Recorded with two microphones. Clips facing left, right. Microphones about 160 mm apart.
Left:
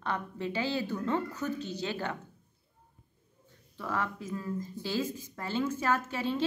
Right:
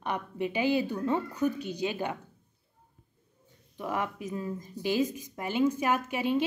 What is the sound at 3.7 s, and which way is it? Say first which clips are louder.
A woman's voice: right 2 dB; 15° right (ahead or behind).